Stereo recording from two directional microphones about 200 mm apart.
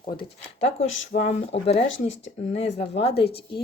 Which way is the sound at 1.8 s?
70° left (ahead or behind).